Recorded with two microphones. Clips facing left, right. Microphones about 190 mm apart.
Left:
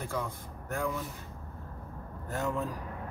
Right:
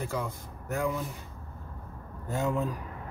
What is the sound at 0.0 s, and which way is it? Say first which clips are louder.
Speech: right 2 dB; 5° right (ahead or behind).